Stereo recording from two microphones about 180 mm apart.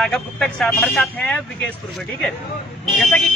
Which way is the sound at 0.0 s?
Centre (ahead or behind).